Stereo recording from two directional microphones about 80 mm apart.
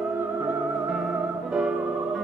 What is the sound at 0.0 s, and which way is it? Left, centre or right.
Theremin, centre.